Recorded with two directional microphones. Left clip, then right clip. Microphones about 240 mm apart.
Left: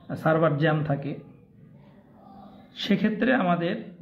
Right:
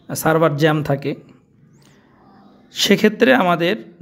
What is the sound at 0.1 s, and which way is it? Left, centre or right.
Speech, right.